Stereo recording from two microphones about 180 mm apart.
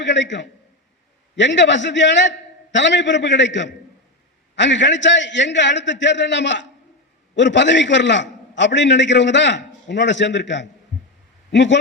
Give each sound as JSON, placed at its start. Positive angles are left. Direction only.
{"t": 0.0, "sound": "a man's voice", "side_deg": 80}